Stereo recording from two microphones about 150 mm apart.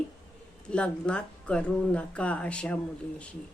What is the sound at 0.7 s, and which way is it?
Speech, 5° left (ahead or behind).